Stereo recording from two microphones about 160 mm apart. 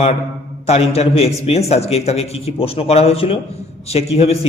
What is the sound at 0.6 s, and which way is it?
A man's voice, 40° left (ahead or behind).